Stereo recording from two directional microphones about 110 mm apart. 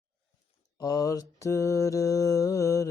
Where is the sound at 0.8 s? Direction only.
35° left (ahead or behind).